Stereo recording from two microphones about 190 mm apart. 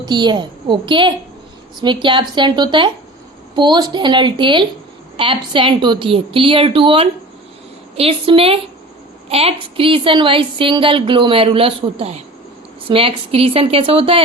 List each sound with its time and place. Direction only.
0.0 s a woman's voice: 25° right (ahead or behind)